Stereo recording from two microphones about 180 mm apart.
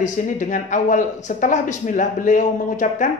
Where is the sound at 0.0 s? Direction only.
45° left (ahead or behind).